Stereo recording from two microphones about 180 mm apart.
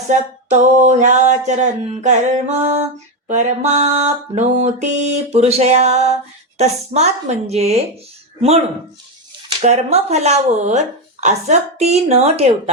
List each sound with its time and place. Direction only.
0.4 s speech: 40° right (ahead or behind)